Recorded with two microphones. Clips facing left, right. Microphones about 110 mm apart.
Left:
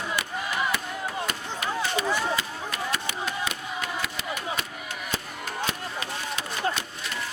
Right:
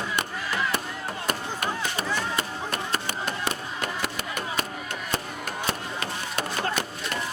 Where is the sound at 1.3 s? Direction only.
50° right (ahead or behind).